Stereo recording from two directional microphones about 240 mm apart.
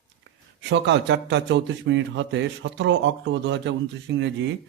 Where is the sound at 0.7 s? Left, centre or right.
Right.